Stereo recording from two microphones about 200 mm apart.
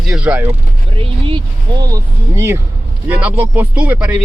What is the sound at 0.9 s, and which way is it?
Speech, 25° right (ahead or behind).